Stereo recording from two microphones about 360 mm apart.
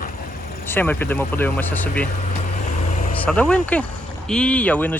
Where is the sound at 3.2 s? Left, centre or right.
Centre.